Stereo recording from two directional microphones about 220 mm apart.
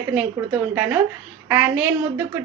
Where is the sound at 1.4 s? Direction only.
5° right (ahead or behind).